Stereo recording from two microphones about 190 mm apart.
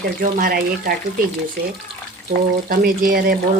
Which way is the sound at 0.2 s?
50° right (ahead or behind).